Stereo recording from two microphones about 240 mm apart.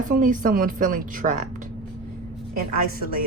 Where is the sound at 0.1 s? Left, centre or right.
Right.